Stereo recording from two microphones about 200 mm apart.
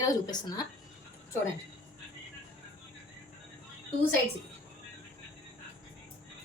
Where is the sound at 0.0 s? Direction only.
20° left (ahead or behind).